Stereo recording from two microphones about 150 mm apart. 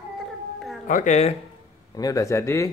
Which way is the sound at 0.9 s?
50° left (ahead or behind).